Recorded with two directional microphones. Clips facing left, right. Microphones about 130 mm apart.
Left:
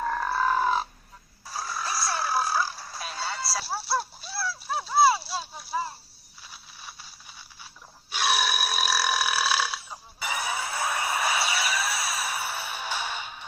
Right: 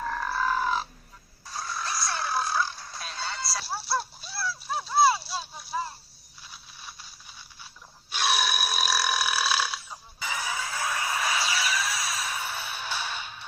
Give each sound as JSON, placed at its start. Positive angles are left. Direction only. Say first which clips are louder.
{"t": 0.0, "sound": "grunt", "louder": "left 3 dB", "side_deg": 30}
{"t": 0.4, "sound": "crow", "louder": "left 3 dB", "side_deg": 40}
{"t": 1.5, "sound": "frog", "louder": "left 1 dB", "side_deg": 5}
{"t": 8.1, "sound": "burping", "louder": "left 1 dB", "side_deg": 5}
{"t": 10.2, "sound": "a sound", "louder": "left 2 dB", "side_deg": 20}
{"t": 12.3, "sound": "music", "louder": "left 2 dB", "side_deg": 10}